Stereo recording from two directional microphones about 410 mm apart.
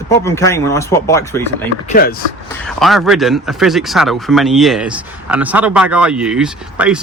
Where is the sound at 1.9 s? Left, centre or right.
Left.